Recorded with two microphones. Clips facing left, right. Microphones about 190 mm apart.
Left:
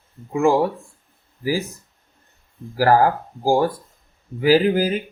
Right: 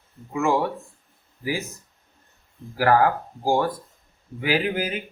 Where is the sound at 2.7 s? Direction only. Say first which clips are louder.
Left 3 dB; 35° left (ahead or behind).